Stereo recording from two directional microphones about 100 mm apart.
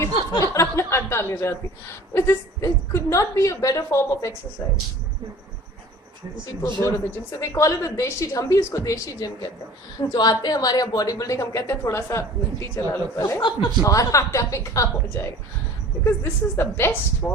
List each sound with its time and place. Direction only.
0.0 s chuckle: 30° left (ahead or behind)
2.1 s a woman's voice: 25° left (ahead or behind)
6.4 s a woman's voice: 30° left (ahead or behind)